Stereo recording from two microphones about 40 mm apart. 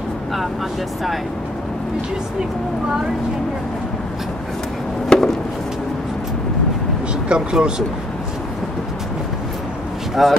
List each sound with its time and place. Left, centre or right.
5.1 s chop: left
7.2 s speech: right
10.2 s speech: centre